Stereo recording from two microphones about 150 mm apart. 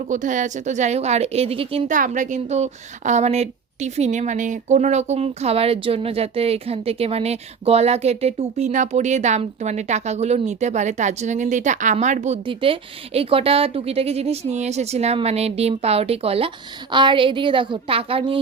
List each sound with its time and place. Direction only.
0.1 s a woman's voice: 55° right (ahead or behind); by 1.9 s 40° right (ahead or behind)
1.9 s a woman's voice: 60° right (ahead or behind)
12.5 s a woman's voice: 35° right (ahead or behind)